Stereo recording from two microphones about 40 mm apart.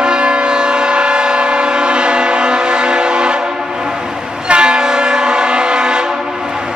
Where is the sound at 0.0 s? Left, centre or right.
Right.